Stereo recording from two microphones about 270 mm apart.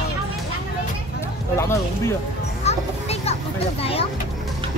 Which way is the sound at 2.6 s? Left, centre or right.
Left.